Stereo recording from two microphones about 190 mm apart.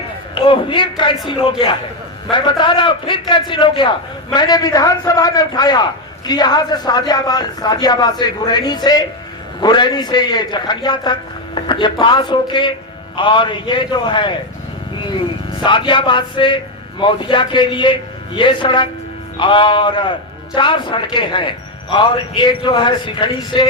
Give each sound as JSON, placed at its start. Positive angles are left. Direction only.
{"t": 0.3, "sound": "a man's voice", "side_deg": 25}
{"t": 15.6, "sound": "a man's voice", "side_deg": 25}